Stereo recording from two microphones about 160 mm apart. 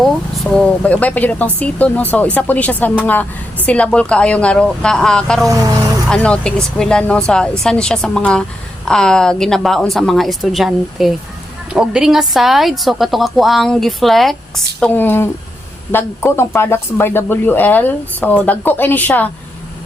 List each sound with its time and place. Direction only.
0.5 s a woman's voice: 5° left (ahead or behind)